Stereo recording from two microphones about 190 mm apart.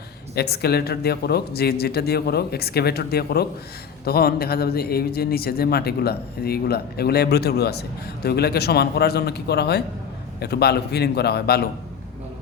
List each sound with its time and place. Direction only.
0.3 s a man's voice: 55° left (ahead or behind)